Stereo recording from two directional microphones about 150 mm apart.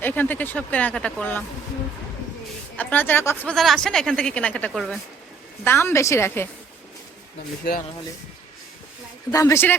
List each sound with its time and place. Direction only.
0.0 s speech: 10° left (ahead or behind)
2.7 s speech: 10° left (ahead or behind)
3.5 s speech: centre (ahead or behind)
5.6 s speech: 15° left (ahead or behind)
9.3 s speech: 20° left (ahead or behind)